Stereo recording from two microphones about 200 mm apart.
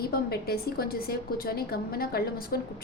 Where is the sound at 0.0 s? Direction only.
50° left (ahead or behind).